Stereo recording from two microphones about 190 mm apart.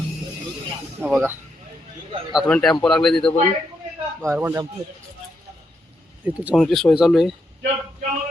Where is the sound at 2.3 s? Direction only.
5° left (ahead or behind).